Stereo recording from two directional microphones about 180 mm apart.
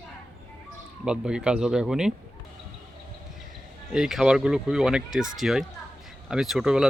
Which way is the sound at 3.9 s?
Centre (ahead or behind).